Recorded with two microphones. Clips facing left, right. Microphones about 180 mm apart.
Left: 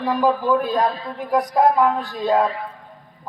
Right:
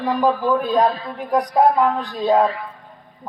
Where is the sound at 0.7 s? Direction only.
20° right (ahead or behind).